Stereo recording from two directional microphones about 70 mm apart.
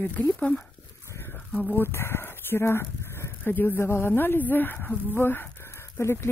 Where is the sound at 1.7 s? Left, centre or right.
Left.